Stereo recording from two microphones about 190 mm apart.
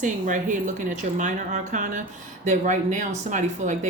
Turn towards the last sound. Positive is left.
turn(degrees=-40)  # may be behind; listen again after turning